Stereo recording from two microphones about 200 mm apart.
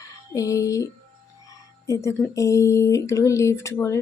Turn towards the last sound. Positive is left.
turn(degrees=15)  # may be behind; listen again after turning